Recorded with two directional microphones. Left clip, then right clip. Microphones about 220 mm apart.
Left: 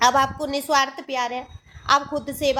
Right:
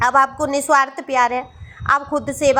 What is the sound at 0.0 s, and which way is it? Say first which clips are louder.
A woman's voice: right 3 dB; 25° right (ahead or behind).